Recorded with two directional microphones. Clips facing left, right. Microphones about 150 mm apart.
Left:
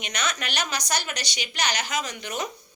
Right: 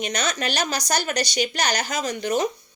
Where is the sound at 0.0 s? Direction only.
35° right (ahead or behind).